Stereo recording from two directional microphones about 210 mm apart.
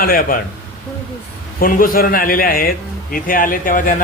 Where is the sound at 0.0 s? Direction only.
40° left (ahead or behind).